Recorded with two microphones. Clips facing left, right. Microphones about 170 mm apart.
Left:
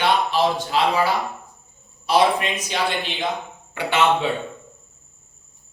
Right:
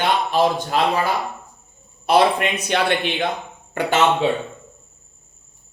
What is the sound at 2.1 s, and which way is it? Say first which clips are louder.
Speech: right 2 dB; 60° right (ahead or behind).